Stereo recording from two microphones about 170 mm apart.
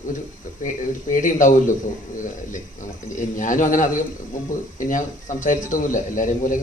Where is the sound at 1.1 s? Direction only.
50° left (ahead or behind).